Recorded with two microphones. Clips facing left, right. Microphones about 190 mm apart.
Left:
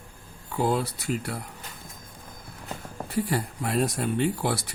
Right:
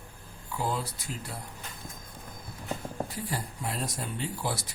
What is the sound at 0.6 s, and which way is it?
Speech, 65° left (ahead or behind).